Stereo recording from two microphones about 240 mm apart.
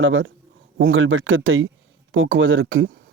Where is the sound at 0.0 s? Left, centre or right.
Right.